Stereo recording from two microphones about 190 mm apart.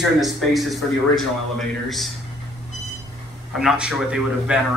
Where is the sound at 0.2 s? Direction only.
Centre (ahead or behind).